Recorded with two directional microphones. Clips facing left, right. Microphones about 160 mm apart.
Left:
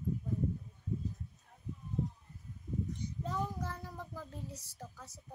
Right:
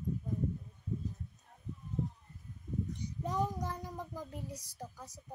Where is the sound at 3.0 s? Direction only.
15° right (ahead or behind).